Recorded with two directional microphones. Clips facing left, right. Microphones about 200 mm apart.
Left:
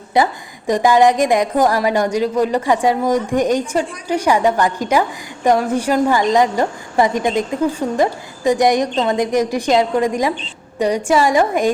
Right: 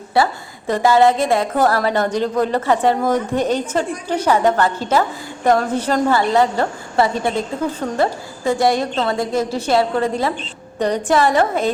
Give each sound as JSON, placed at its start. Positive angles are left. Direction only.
{"t": 0.1, "sound": "a woman's voice", "side_deg": 15}